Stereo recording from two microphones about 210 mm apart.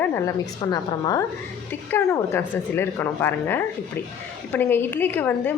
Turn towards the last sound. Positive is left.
turn(degrees=10)  # may be behind; listen again after turning